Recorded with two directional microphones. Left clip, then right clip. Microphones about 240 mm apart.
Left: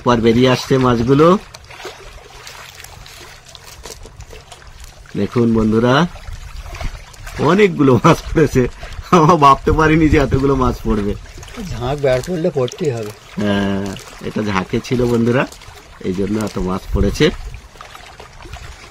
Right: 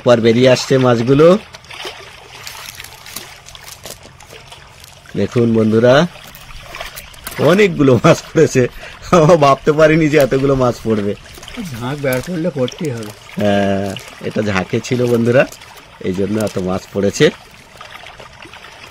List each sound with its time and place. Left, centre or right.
0.0 s speech: centre
5.2 s speech: centre
7.3 s speech: centre
11.8 s speech: left
13.4 s speech: centre